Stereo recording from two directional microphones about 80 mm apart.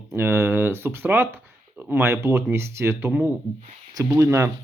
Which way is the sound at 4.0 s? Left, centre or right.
Right.